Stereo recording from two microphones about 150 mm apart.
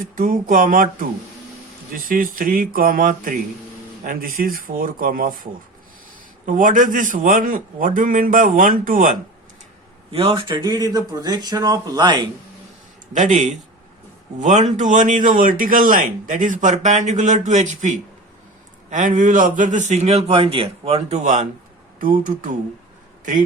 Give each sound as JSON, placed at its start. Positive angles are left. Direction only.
{"t": 0.0, "sound": "speech", "side_deg": -65}
{"t": 6.4, "sound": "speech", "side_deg": -60}
{"t": 10.1, "sound": "speech", "side_deg": -40}
{"t": 13.1, "sound": "a man's voice", "side_deg": -55}
{"t": 21.9, "sound": "speech", "side_deg": -65}